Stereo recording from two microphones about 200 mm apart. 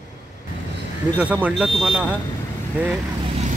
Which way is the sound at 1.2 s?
5° right (ahead or behind).